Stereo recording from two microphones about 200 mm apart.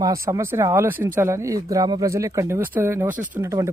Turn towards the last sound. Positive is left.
turn(degrees=-15)  # may be behind; listen again after turning